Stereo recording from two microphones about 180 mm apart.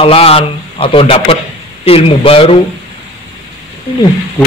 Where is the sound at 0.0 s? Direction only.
35° left (ahead or behind).